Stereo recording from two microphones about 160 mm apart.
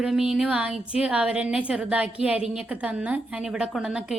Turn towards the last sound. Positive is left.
turn(degrees=-5)  # may be behind; listen again after turning